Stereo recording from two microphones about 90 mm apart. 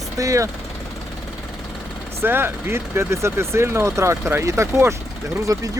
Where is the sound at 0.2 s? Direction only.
40° right (ahead or behind).